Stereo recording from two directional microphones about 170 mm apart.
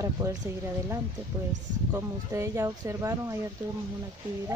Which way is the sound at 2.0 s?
15° right (ahead or behind).